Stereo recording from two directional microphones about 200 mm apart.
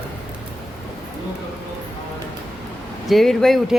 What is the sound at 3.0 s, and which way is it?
Speech, centre (ahead or behind).